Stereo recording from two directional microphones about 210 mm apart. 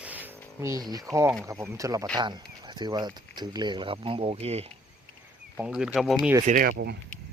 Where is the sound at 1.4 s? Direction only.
15° right (ahead or behind).